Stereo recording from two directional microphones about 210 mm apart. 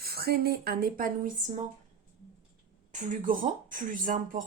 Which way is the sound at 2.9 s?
35° right (ahead or behind).